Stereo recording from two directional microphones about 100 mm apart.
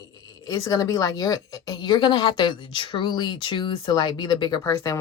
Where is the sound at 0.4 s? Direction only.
35° left (ahead or behind); by 4.6 s 50° left (ahead or behind).